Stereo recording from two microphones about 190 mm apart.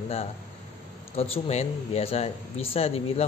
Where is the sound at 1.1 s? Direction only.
30° left (ahead or behind).